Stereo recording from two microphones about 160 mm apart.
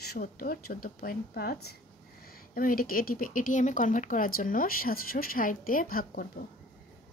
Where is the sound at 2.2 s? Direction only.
65° left (ahead or behind).